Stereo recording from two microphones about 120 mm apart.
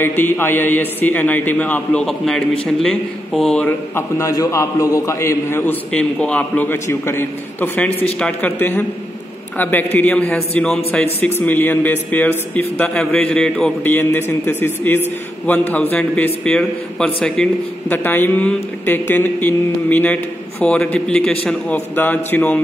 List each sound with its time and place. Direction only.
0.0 s speech: 20° left (ahead or behind)
3.6 s a man's voice: 20° left (ahead or behind)